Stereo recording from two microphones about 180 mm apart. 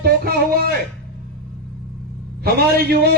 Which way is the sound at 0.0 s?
60° right (ahead or behind).